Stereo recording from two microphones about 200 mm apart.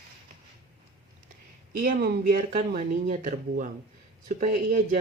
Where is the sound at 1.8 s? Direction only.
45° right (ahead or behind).